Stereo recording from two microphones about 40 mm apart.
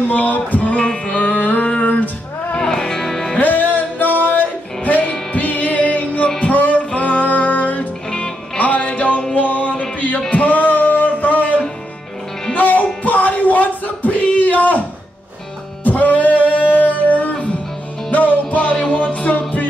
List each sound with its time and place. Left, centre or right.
0.1 s music: left
1.0 s music: left
2.6 s music: centre
3.3 s music: left
13.0 s a sound: left
15.8 s music: left